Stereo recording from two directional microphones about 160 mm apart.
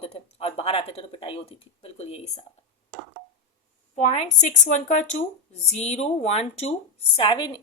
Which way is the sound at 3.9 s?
45° left (ahead or behind).